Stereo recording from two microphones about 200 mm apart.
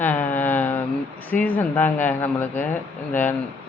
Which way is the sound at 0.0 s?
10° left (ahead or behind).